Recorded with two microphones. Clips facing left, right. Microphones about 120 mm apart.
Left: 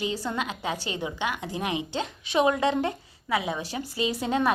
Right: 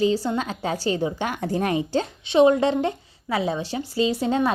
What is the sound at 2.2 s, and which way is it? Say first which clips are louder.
A woman's voice: right 6 dB; 30° right (ahead or behind).